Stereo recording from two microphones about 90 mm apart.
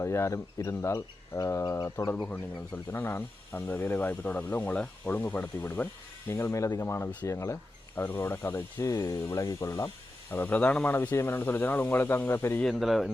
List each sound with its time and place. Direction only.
0.0 s speech: 30° left (ahead or behind)
10.3 s speech: 20° left (ahead or behind)
12.6 s speech: centre (ahead or behind)